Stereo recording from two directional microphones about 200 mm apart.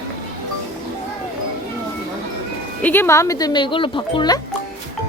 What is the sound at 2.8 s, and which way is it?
Speech, 10° left (ahead or behind).